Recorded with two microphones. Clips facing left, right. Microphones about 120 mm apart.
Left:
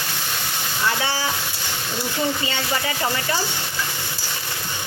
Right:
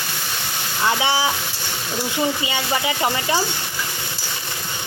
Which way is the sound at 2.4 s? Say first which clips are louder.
Right 2 dB; 15° right (ahead or behind).